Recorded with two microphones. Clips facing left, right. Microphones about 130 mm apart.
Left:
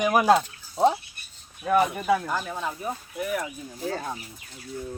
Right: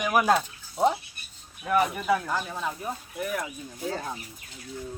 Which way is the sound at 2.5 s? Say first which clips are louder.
Left 1 dB; 5° left (ahead or behind).